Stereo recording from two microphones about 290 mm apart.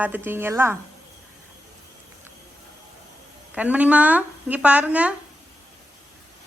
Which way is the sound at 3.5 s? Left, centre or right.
Centre.